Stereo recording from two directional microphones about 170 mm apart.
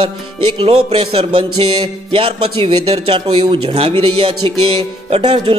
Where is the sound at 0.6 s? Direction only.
35° right (ahead or behind).